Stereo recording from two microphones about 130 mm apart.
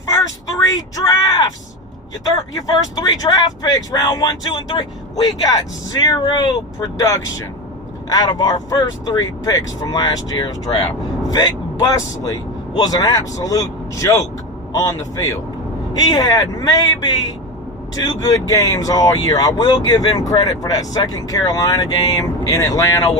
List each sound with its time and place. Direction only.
0.1 s a sound: 25° left (ahead or behind)
2.6 s speech: 30° left (ahead or behind)
10.7 s speech: 40° left (ahead or behind)
11.3 s speech: 30° left (ahead or behind)